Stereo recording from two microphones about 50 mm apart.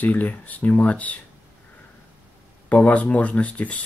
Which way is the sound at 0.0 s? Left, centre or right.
Left.